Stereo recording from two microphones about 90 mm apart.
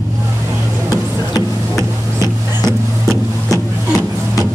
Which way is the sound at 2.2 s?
35° right (ahead or behind).